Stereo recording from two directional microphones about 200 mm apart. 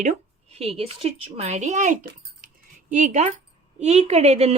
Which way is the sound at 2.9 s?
35° right (ahead or behind).